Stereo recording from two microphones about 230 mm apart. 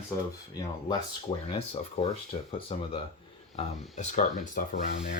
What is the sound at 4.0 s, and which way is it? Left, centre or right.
Speech, left.